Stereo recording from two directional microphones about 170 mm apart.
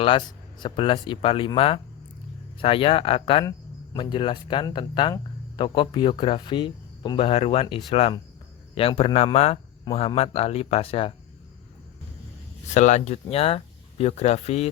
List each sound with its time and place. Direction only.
0.0 s speech: 30° left (ahead or behind)
12.7 s speech: 45° left (ahead or behind)